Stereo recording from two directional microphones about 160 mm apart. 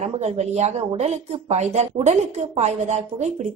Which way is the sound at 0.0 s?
45° right (ahead or behind).